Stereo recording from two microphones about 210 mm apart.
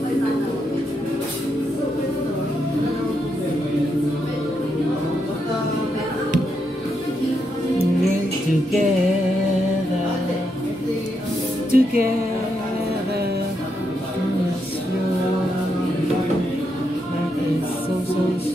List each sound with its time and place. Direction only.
11.7 s music: 45° right (ahead or behind)